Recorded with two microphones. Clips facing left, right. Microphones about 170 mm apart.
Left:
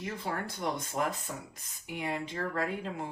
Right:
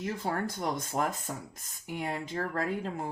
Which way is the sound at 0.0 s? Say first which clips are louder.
Right 4 dB; 45° right (ahead or behind).